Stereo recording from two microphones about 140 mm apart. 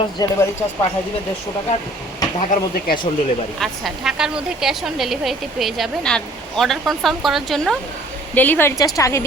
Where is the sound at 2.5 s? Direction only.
90° left.